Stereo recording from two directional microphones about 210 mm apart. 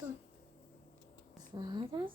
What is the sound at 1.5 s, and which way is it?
Speech, 20° right (ahead or behind).